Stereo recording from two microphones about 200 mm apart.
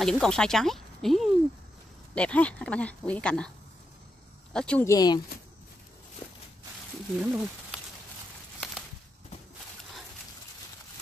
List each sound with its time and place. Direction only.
0.0 s speech: 5° left (ahead or behind)
4.8 s speech: 20° left (ahead or behind)
7.2 s speech: 5° right (ahead or behind)